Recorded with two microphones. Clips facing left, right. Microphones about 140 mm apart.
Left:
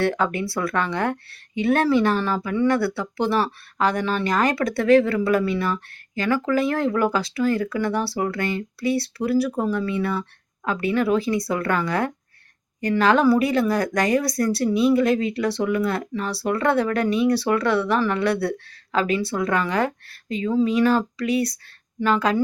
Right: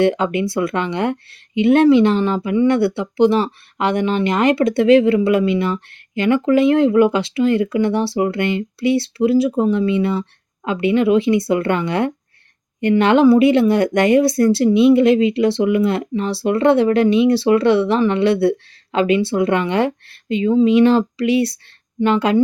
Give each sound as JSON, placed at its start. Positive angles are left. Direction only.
{"t": 0.0, "sound": "speech", "side_deg": -20}